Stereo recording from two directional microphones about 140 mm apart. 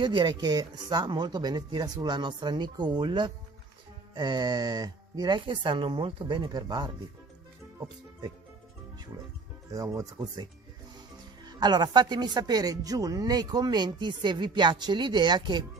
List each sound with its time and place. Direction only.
0.0 s speech: 35° right (ahead or behind)
9.7 s speech: 25° right (ahead or behind)